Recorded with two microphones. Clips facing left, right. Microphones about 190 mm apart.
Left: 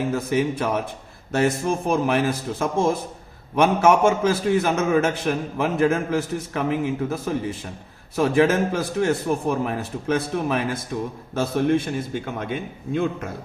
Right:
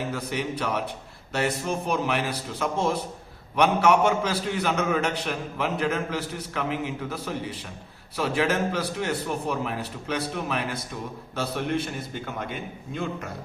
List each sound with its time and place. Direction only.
0.1 s a man's voice: 45° left (ahead or behind)